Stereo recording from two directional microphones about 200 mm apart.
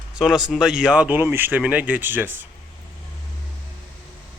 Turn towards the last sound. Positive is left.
turn(degrees=-10)  # may be behind; listen again after turning